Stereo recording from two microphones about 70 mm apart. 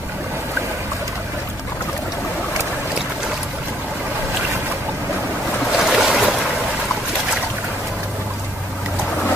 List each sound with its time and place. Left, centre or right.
5.7 s boat: centre